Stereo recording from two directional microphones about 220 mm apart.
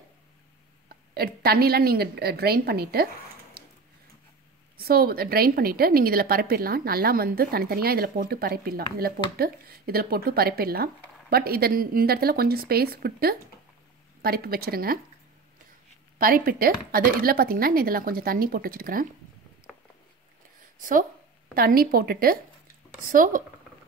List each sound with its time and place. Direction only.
0.8 s a woman's voice: 45° right (ahead or behind)
4.7 s a woman's voice: 45° right (ahead or behind)
16.2 s speech: 40° right (ahead or behind)
19.7 s a sound: centre (ahead or behind)
21.5 s a woman's voice: 40° right (ahead or behind)